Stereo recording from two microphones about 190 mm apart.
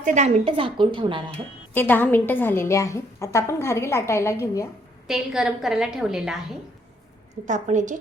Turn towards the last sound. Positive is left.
turn(degrees=-40)  # may be behind; listen again after turning